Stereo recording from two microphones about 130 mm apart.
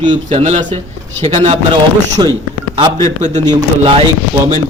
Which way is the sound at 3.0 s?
65° right (ahead or behind).